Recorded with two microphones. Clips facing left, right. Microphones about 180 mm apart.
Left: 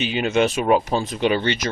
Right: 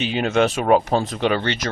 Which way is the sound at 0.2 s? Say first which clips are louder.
Right 1 dB; 45° right (ahead or behind).